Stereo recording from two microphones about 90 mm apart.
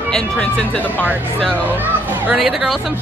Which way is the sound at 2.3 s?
5° right (ahead or behind).